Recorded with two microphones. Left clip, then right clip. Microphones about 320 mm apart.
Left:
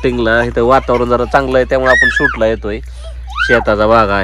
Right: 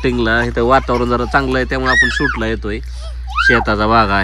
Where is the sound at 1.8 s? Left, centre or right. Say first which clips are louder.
Left 1 dB; left.